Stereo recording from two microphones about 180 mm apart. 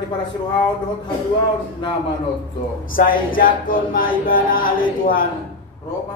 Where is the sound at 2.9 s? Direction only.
50° left (ahead or behind).